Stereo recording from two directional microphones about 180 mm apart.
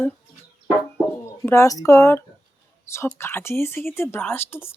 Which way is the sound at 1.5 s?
15° left (ahead or behind).